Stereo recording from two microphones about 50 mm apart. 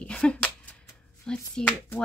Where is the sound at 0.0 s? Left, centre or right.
Left.